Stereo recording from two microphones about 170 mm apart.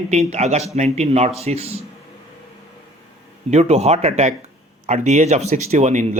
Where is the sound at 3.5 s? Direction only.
40° right (ahead or behind).